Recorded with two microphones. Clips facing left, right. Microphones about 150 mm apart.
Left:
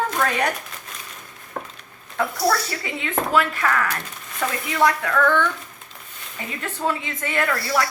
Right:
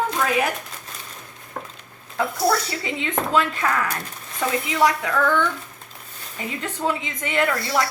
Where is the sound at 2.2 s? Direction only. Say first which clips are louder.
Even; 20° right (ahead or behind).